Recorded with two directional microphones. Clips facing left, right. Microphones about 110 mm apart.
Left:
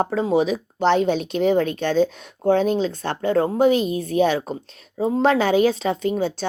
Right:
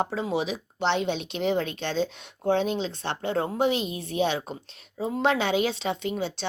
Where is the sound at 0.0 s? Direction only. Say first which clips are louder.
Left 8 dB; 45° left (ahead or behind).